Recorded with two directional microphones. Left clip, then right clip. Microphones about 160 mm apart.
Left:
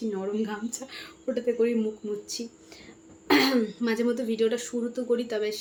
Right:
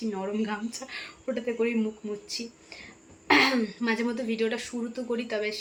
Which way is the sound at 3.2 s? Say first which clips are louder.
Right 1 dB; 10° left (ahead or behind).